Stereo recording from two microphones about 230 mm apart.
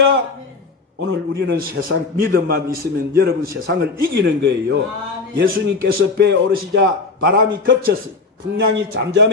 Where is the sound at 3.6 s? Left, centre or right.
Right.